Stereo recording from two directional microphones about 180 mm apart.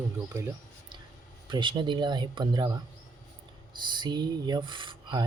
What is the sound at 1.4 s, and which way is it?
Speech, 25° right (ahead or behind).